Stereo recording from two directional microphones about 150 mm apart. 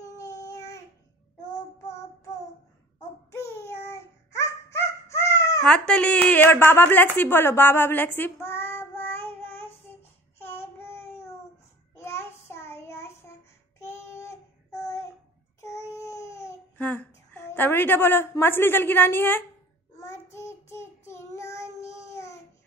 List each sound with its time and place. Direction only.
0.0 s child singing: 20° left (ahead or behind)
3.3 s a sound: 15° left (ahead or behind)
5.7 s a woman's voice: 5° left (ahead or behind)
10.4 s child singing: 15° left (ahead or behind)
15.6 s babbling: 20° left (ahead or behind)
20.3 s child singing: 15° left (ahead or behind)